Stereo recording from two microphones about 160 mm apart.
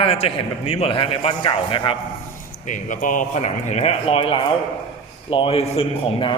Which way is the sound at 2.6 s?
55° left (ahead or behind).